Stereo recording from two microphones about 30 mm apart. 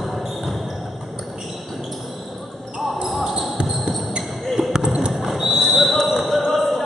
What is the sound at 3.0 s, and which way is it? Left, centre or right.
Basketball bounce, centre.